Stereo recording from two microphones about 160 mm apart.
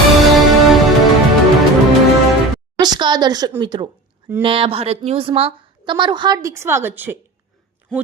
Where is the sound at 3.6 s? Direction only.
30° right (ahead or behind).